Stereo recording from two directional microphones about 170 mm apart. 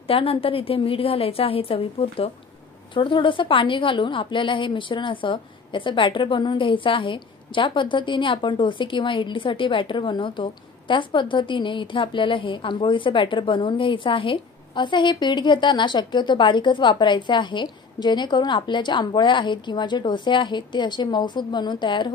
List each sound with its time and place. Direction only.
0.1 s a woman's voice: 35° left (ahead or behind)